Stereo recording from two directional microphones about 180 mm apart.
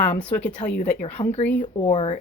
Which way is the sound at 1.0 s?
35° left (ahead or behind).